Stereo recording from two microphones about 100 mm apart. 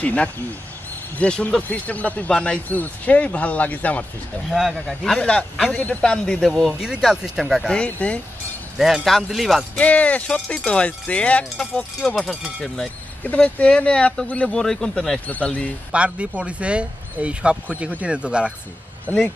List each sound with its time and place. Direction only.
0.0 s speech: 15° left (ahead or behind)
4.5 s a man's voice: 5° right (ahead or behind)
6.8 s a man's voice: 5° right (ahead or behind)
7.7 s speech: 15° left (ahead or behind)
8.7 s a man's voice: 5° right (ahead or behind)
9.8 s a man's voice: 15° left (ahead or behind)
13.2 s speech: 15° left (ahead or behind)
15.9 s speech: 10° right (ahead or behind)
19.0 s speech: 15° left (ahead or behind)